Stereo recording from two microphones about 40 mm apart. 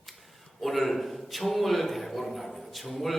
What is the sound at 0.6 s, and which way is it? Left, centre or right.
A man's voice, centre.